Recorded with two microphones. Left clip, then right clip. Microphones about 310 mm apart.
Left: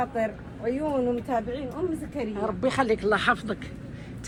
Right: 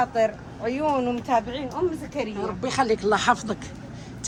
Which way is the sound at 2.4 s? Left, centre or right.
Centre.